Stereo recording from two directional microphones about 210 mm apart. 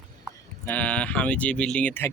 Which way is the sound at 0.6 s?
5° left (ahead or behind).